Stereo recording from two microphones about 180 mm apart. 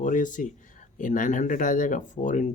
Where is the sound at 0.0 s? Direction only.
45° left (ahead or behind).